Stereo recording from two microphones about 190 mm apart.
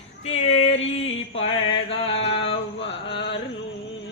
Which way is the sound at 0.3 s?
35° left (ahead or behind).